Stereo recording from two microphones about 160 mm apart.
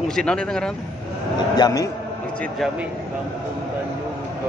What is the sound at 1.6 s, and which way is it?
Speech, 20° left (ahead or behind).